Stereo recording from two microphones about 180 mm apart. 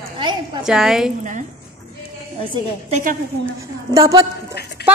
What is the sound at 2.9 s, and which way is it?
Speech, 50° right (ahead or behind).